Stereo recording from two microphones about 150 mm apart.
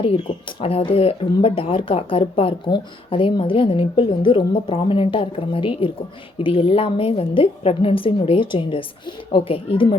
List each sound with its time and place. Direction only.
0.0 s speech: 35° left (ahead or behind)